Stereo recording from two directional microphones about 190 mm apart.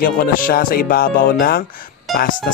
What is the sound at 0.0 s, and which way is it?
Speech, 50° left (ahead or behind).